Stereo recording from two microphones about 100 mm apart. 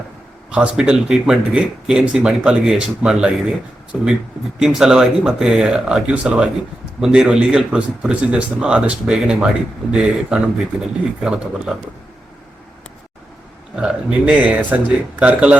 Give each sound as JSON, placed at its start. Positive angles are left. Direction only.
{"t": 0.5, "sound": "speech", "side_deg": -10}
{"t": 13.7, "sound": "speech", "side_deg": -10}